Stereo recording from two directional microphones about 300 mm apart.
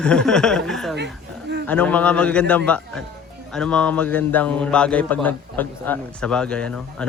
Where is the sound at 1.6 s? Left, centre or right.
Centre.